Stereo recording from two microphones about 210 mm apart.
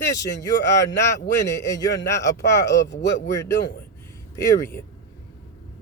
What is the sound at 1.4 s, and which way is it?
Speech, 15° left (ahead or behind).